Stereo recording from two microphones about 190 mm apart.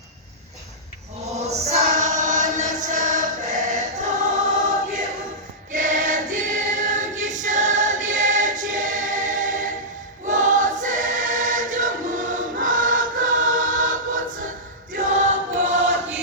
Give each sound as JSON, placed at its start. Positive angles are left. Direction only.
{"t": 1.5, "sound": "choir", "side_deg": -35}
{"t": 5.7, "sound": "choir", "side_deg": -45}